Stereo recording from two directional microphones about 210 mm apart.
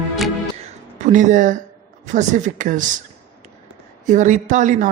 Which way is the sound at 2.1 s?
35° right (ahead or behind).